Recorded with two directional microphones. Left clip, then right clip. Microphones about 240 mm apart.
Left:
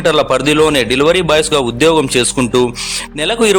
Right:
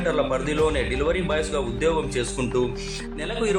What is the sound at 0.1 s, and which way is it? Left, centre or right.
A man's voice, left.